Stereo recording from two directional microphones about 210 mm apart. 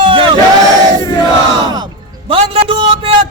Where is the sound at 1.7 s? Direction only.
25° right (ahead or behind).